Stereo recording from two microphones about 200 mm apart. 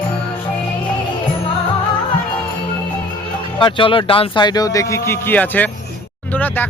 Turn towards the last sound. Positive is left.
turn(degrees=10)  # may be behind; listen again after turning